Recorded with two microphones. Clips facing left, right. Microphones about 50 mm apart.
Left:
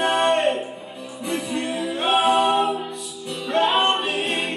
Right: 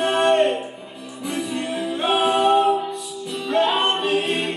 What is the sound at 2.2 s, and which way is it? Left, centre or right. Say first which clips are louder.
A capella: right 1 dB; left.